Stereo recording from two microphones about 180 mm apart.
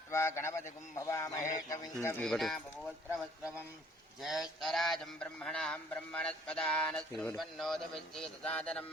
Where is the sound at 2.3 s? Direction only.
Centre (ahead or behind).